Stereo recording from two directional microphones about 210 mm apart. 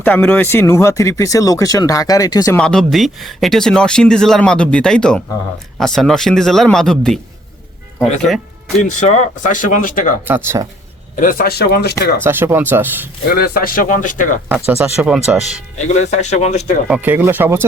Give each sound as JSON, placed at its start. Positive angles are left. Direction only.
{"t": 0.0, "sound": "speech", "side_deg": 5}
{"t": 2.6, "sound": "speech", "side_deg": 5}
{"t": 8.8, "sound": "speech", "side_deg": 35}
{"t": 10.2, "sound": "speech", "side_deg": -10}
{"t": 11.2, "sound": "speech", "side_deg": 40}
{"t": 12.2, "sound": "speech", "side_deg": -10}
{"t": 13.3, "sound": "speech", "side_deg": 45}
{"t": 14.7, "sound": "speech", "side_deg": -5}
{"t": 16.0, "sound": "speech", "side_deg": 35}
{"t": 16.9, "sound": "speech", "side_deg": -10}